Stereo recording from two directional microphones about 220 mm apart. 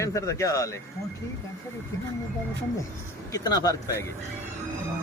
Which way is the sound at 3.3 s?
15° left (ahead or behind).